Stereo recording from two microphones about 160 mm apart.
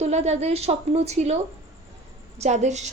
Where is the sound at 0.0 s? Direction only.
45° right (ahead or behind).